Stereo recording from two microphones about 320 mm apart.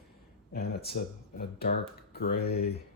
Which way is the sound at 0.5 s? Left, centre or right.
Left.